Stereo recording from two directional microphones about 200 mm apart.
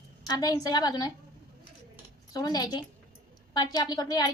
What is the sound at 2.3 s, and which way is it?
A woman's voice, 20° left (ahead or behind).